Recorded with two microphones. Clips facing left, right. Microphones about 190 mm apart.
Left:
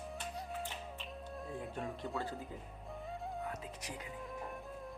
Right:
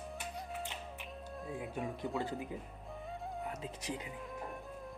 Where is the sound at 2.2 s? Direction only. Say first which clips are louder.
Right 3 dB; 15° right (ahead or behind).